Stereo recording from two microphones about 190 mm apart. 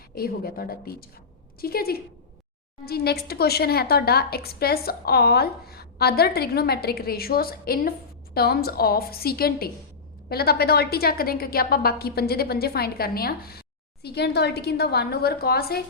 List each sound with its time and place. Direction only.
0.1 s a woman's voice: 55° left (ahead or behind)